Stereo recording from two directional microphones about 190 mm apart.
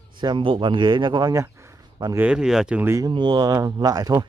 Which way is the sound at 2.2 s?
5° right (ahead or behind).